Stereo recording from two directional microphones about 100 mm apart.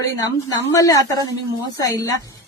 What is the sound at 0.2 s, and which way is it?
A woman's voice, 40° left (ahead or behind).